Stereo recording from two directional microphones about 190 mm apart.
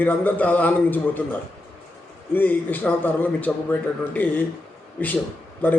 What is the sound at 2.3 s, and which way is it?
A man's voice, 10° left (ahead or behind).